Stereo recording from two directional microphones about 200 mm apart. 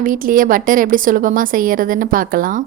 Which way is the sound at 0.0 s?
45° right (ahead or behind).